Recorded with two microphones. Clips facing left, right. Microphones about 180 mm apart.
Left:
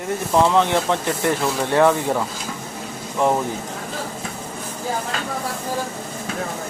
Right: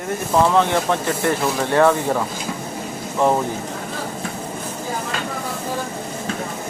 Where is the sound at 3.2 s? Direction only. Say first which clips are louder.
Right 1 dB; 15° right (ahead or behind).